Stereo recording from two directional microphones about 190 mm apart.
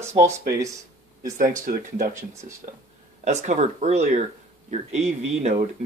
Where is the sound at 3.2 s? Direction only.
40° right (ahead or behind).